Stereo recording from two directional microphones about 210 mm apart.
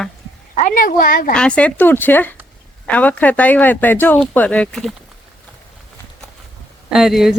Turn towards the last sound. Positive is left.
turn(degrees=0)  # may be behind; listen again after turning